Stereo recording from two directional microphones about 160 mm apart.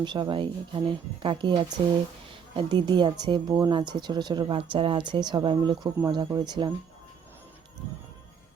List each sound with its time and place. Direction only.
0.0 s speech: 30° right (ahead or behind)